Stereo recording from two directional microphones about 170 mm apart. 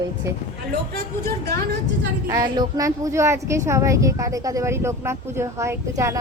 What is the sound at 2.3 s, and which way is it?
Speech, 20° right (ahead or behind).